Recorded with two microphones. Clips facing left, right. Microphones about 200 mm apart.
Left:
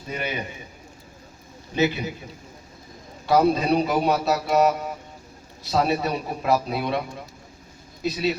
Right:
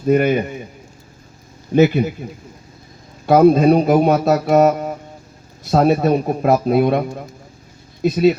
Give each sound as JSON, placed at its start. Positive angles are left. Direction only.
{"t": 0.0, "sound": "speech", "side_deg": -50}
{"t": 1.7, "sound": "speech", "side_deg": -50}
{"t": 3.2, "sound": "speech", "side_deg": -50}